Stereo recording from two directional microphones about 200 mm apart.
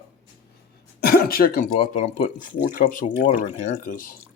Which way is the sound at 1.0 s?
50° left (ahead or behind).